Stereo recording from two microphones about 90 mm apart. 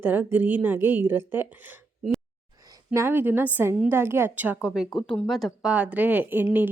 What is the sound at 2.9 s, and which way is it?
Speech, 30° right (ahead or behind).